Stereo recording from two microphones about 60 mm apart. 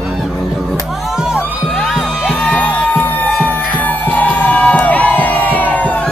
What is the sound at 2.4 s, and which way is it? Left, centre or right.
Music, left.